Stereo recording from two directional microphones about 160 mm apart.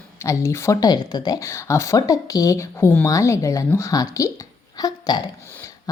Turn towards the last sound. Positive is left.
turn(degrees=25)  # may be behind; listen again after turning